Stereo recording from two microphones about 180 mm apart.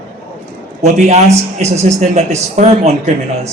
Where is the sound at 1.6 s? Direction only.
40° right (ahead or behind).